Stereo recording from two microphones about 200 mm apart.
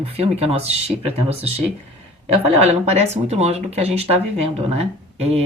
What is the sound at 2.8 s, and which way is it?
A woman's voice, 30° right (ahead or behind).